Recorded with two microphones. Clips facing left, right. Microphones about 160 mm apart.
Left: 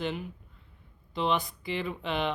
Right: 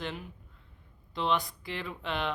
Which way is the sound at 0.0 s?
Centre (ahead or behind).